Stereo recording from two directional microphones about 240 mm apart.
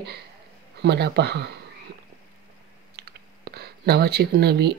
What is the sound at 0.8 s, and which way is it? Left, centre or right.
Speech, right.